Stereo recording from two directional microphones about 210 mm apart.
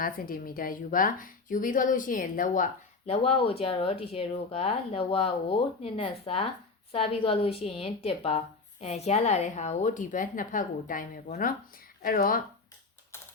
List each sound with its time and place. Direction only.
0.0 s a woman's voice: 45° left (ahead or behind)
3.1 s a woman's voice: 25° left (ahead or behind)